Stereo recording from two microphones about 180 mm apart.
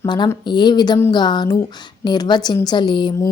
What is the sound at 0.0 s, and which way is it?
A woman's voice, 25° left (ahead or behind).